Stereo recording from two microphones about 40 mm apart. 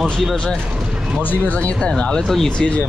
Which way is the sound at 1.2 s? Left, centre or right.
Left.